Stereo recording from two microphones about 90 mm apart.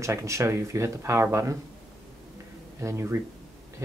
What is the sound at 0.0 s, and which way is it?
Speech, 35° right (ahead or behind).